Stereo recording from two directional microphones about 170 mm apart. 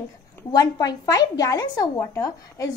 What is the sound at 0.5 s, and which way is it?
A woman's voice, 20° left (ahead or behind).